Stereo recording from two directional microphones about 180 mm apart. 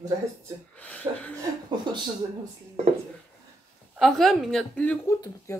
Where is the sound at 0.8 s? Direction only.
10° left (ahead or behind).